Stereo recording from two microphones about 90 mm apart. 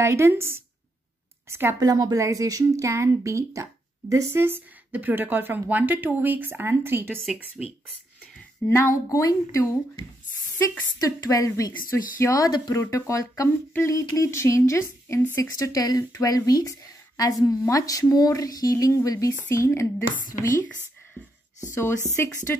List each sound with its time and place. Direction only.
0.0 s speech: 30° right (ahead or behind)
1.8 s speech: 45° right (ahead or behind); by 7.2 s 25° right (ahead or behind)
7.6 s speech: 10° right (ahead or behind)
8.6 s speech: 35° left (ahead or behind)
11.0 s speech: 40° left (ahead or behind)
21.7 s speech: 30° left (ahead or behind)